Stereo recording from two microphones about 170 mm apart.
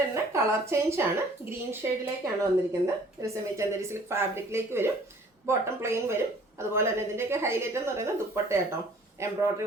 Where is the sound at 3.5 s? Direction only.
15° right (ahead or behind).